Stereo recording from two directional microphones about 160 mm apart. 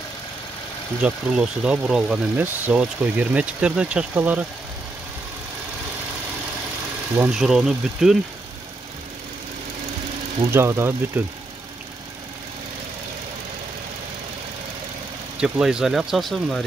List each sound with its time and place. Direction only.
1.0 s speech: 5° right (ahead or behind)
7.2 s speech: 5° right (ahead or behind)
10.4 s speech: 15° right (ahead or behind)
15.4 s speech: 5° right (ahead or behind)